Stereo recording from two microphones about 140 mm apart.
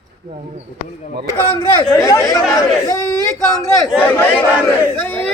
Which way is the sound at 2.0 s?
25° left (ahead or behind).